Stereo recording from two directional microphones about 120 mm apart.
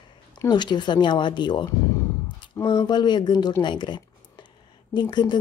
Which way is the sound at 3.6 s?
40° left (ahead or behind).